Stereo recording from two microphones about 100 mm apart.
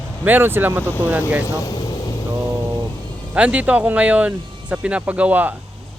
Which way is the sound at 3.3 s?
15° right (ahead or behind).